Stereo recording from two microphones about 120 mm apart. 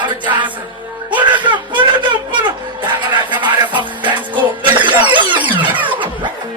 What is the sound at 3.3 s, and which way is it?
Music, 40° right (ahead or behind).